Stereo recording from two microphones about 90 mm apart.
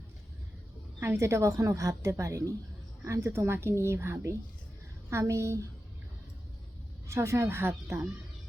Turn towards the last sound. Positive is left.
turn(degrees=-30)  # may be behind; listen again after turning